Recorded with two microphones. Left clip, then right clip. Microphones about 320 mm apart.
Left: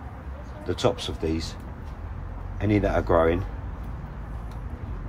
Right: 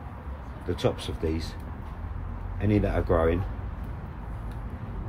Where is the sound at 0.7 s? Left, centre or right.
Centre.